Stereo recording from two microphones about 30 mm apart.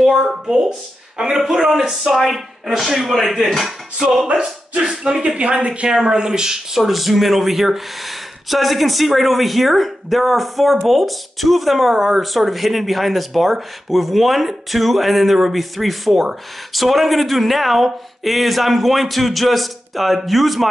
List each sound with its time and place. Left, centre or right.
0.5 s speech: right
1.3 s speech: centre
4.3 s speech: right
6.8 s speech: centre